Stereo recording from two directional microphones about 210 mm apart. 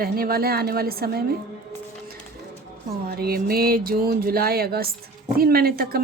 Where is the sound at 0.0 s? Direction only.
45° right (ahead or behind).